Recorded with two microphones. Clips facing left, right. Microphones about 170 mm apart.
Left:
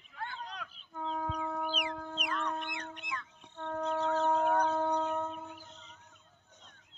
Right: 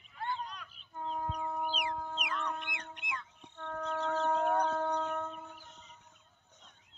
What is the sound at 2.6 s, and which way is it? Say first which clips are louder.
Cat: left 4 dB; 40° left (ahead or behind).